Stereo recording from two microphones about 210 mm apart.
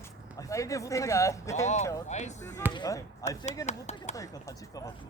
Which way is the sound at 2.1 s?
35° left (ahead or behind).